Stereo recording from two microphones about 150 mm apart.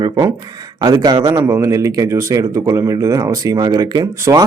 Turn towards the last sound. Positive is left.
turn(degrees=-25)  # may be behind; listen again after turning